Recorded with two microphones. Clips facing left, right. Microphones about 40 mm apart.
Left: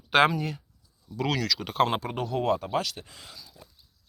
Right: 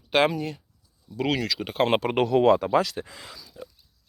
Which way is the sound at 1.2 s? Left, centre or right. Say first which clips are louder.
Right 2 dB; right.